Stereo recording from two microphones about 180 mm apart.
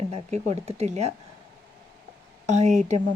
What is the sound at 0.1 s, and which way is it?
Speech, 40° right (ahead or behind).